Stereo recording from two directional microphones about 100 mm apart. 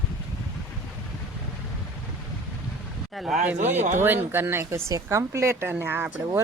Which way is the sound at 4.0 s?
20° right (ahead or behind).